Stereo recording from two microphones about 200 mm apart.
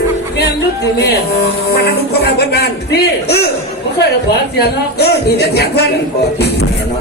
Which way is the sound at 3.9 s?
55° left (ahead or behind).